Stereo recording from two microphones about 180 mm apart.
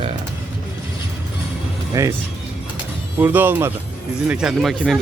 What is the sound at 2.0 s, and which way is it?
Speech, 15° right (ahead or behind).